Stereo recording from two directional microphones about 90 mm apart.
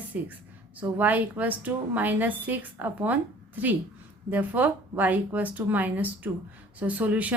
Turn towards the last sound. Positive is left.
turn(degrees=-15)  # may be behind; listen again after turning